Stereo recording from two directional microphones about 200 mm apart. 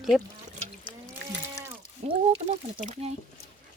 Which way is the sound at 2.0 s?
30° right (ahead or behind).